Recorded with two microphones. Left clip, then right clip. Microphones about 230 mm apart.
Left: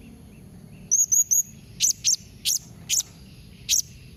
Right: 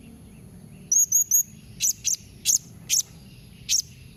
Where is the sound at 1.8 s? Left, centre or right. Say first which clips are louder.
Left 3 dB; centre.